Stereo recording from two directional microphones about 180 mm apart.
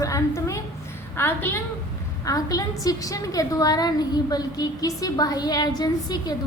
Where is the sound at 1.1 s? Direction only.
10° left (ahead or behind).